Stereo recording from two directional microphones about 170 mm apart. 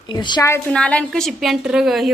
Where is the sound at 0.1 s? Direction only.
25° left (ahead or behind).